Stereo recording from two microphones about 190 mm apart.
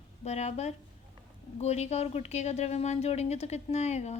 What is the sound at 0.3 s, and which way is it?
A woman's voice, 35° left (ahead or behind).